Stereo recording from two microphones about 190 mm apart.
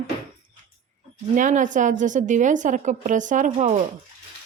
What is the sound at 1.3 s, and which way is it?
A woman's voice, 40° right (ahead or behind).